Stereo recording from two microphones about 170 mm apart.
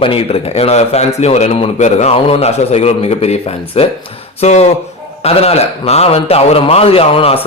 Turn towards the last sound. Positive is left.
turn(degrees=35)  # may be behind; listen again after turning